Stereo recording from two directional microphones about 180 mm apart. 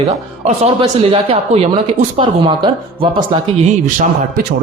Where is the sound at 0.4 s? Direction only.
30° right (ahead or behind).